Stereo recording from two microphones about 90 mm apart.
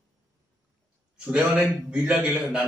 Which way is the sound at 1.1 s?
10° right (ahead or behind).